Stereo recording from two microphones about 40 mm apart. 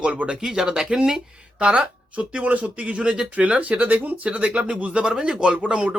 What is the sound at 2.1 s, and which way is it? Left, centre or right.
Speech, right.